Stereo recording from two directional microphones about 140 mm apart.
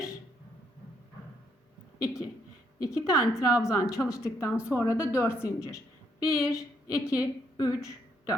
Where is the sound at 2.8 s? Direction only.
25° left (ahead or behind).